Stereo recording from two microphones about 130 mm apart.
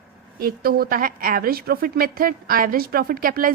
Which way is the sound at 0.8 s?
90° right.